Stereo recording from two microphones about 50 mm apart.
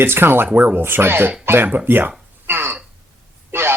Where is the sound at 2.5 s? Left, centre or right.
Right.